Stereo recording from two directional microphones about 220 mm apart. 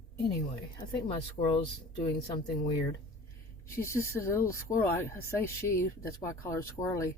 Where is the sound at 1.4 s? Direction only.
35° left (ahead or behind).